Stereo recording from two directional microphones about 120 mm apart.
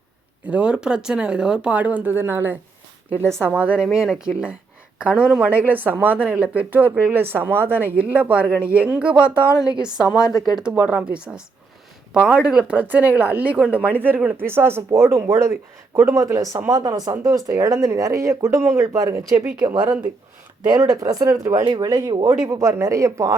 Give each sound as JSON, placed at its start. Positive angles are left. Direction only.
{"t": 0.4, "sound": "speech", "side_deg": -10}
{"t": 3.5, "sound": "speech", "side_deg": -10}
{"t": 9.2, "sound": "a woman's voice", "side_deg": 25}
{"t": 10.6, "sound": "speech", "side_deg": -10}
{"t": 20.7, "sound": "speech", "side_deg": -30}
{"t": 22.4, "sound": "speech", "side_deg": -25}